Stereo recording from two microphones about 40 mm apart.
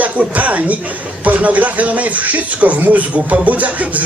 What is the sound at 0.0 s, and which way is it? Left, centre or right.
Speech, right.